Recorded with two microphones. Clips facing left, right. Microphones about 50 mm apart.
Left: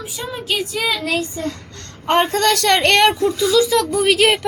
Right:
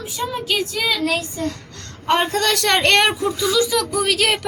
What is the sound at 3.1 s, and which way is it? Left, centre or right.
Speech, centre.